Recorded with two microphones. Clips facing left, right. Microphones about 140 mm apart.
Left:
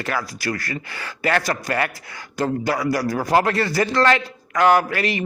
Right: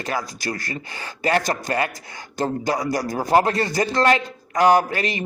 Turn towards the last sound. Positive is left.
turn(degrees=-20)  # may be behind; listen again after turning